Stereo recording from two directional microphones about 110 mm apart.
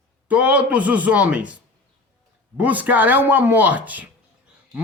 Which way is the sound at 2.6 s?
15° right (ahead or behind).